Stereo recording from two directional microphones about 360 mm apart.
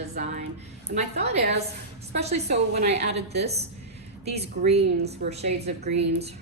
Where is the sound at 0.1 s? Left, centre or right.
Centre.